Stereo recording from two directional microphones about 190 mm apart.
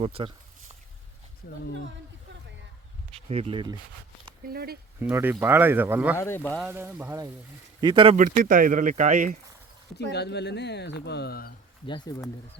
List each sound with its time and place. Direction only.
0.0 s speech: 30° right (ahead or behind)
3.1 s speech: 30° right (ahead or behind)
4.4 s speech: 55° right (ahead or behind)
4.9 s speech: 10° right (ahead or behind)
6.1 s speech: 10° left (ahead or behind)
6.7 s speech: 10° right (ahead or behind)
8.1 s speech: 45° right (ahead or behind)
10.1 s speech: 60° left (ahead or behind)
11.9 s speech: 25° left (ahead or behind)